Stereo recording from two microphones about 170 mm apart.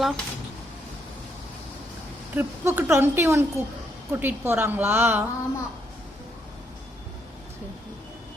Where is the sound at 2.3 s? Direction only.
10° right (ahead or behind).